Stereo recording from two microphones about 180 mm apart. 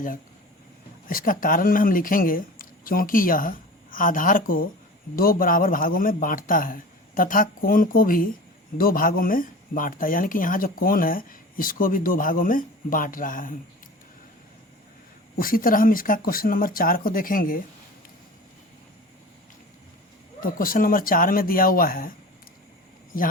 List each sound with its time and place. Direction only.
1.0 s speech: 50° left (ahead or behind)
15.4 s speech: 50° left (ahead or behind)
20.4 s speech: 50° left (ahead or behind)